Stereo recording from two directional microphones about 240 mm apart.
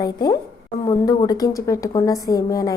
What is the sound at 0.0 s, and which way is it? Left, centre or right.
A woman's voice, centre.